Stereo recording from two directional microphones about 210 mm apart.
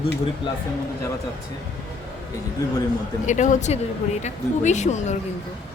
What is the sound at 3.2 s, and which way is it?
Speech, 35° left (ahead or behind).